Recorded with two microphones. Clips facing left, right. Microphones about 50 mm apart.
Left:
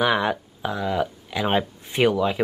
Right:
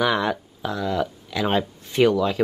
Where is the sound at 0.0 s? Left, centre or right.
Centre.